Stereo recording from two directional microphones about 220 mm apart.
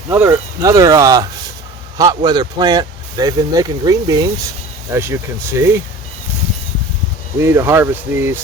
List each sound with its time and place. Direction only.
0.1 s speech: 10° right (ahead or behind)
7.4 s speech: 10° right (ahead or behind)